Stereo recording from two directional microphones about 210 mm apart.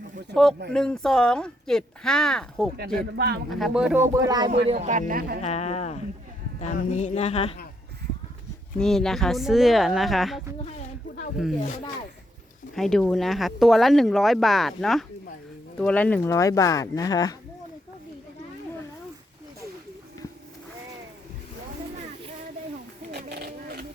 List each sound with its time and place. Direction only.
0.7 s speech: 5° left (ahead or behind)
3.2 s a man's voice: 50° right (ahead or behind)
3.5 s speech: centre (ahead or behind); by 4.5 s 20° right (ahead or behind)
4.6 s speech: 30° right (ahead or behind)
5.4 s speech: 30° left (ahead or behind)
8.8 s speech: centre (ahead or behind)
12.7 s speech: centre (ahead or behind); by 17.3 s 20° left (ahead or behind)
23.1 s a sound: 50° right (ahead or behind)